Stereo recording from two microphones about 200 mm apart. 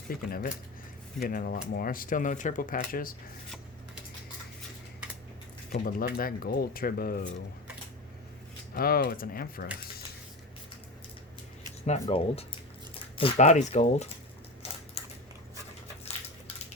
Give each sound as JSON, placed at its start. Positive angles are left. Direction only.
{"t": 0.1, "sound": "speech", "side_deg": 45}
{"t": 5.7, "sound": "speech", "side_deg": 50}
{"t": 8.7, "sound": "speech", "side_deg": 50}
{"t": 11.9, "sound": "speech", "side_deg": 30}